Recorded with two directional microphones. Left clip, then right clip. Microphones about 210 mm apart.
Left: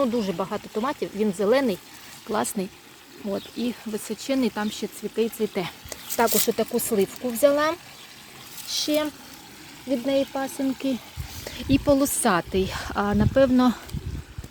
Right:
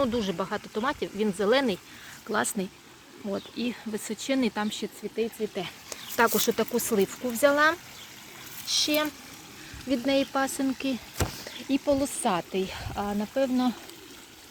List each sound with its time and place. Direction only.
0.0 s speech: 5° left (ahead or behind)
5.1 s speech: 25° left (ahead or behind)
5.9 s snake: centre (ahead or behind)
6.6 s speech: centre (ahead or behind)
10.8 s speech: 10° left (ahead or behind)
11.7 s speech: 30° left (ahead or behind)